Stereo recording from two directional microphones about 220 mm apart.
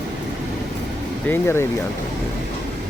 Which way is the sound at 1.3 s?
10° left (ahead or behind).